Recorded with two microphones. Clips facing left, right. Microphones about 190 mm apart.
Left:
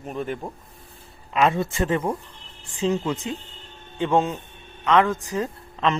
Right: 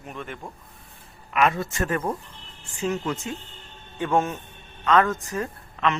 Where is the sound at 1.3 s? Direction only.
25° left (ahead or behind).